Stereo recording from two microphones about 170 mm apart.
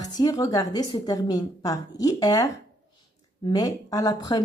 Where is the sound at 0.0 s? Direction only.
25° left (ahead or behind).